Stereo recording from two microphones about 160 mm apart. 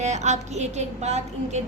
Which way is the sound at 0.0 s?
45° right (ahead or behind).